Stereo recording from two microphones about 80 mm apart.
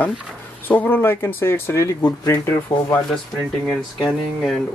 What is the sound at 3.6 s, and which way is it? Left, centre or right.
Speech, centre.